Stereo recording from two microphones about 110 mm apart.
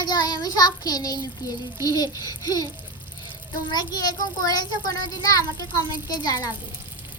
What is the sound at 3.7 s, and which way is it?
A child's voice, 40° left (ahead or behind).